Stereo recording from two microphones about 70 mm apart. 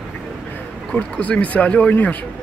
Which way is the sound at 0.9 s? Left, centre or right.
Left.